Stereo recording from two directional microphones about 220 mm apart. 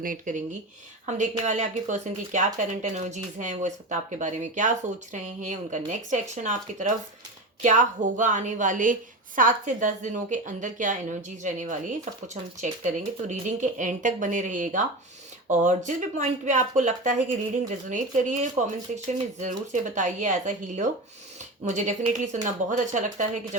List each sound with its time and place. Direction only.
0.0 s speech: 35° right (ahead or behind)
1.5 s speech: 35° right (ahead or behind)